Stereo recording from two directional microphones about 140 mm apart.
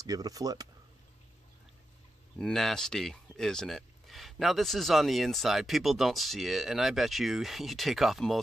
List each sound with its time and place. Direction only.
0.0 s speech: 25° right (ahead or behind)
2.3 s speech: centre (ahead or behind)